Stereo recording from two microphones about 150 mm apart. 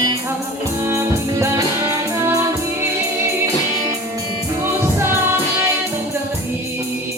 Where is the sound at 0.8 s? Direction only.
15° right (ahead or behind).